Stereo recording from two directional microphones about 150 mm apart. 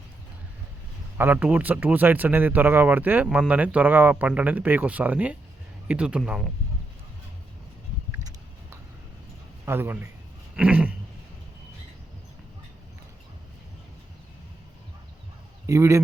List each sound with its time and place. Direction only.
1.2 s speech: 10° right (ahead or behind)
9.6 s speech: 15° right (ahead or behind)
10.5 s a sound: 10° right (ahead or behind)
15.6 s speech: 20° right (ahead or behind)